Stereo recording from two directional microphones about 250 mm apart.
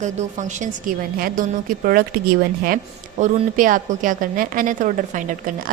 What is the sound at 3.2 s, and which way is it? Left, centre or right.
A woman's voice, right.